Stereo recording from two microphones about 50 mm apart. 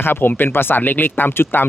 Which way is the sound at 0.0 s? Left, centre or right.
Left.